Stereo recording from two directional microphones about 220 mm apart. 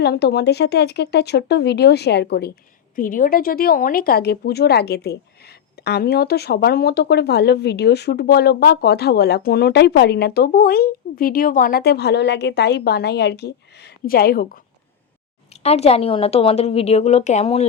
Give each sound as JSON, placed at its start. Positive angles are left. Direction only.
{"t": 0.0, "sound": "speech", "side_deg": 45}
{"t": 15.6, "sound": "a woman's voice", "side_deg": 30}